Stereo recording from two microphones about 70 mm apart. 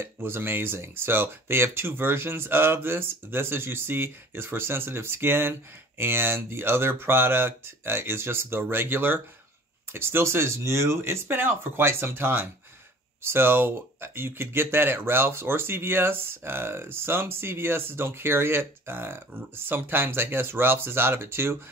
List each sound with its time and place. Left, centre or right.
0.0 s speech: right